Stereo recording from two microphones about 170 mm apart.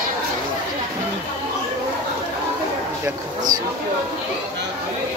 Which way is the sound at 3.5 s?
20° right (ahead or behind).